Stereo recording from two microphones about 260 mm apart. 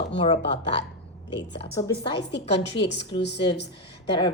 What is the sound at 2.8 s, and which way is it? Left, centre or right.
Speech, left.